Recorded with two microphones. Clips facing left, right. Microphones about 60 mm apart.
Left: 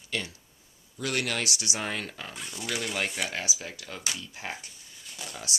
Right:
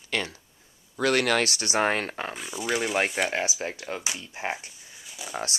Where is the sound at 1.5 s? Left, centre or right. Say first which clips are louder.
Right 8 dB; right.